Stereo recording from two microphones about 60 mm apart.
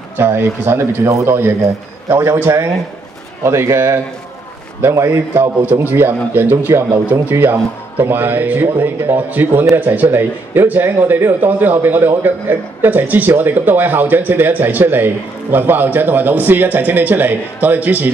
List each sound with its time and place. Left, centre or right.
0.2 s a man's voice: right
3.4 s a man's voice: right
5.7 s a man's voice: right